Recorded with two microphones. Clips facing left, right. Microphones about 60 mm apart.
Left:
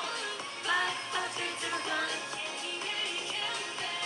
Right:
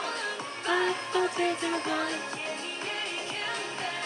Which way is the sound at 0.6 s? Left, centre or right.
Right.